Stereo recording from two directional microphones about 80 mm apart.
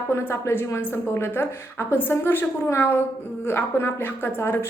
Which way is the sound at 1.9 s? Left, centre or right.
Left.